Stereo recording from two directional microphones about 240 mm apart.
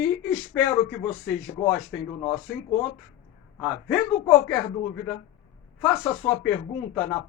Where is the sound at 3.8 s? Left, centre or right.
Centre.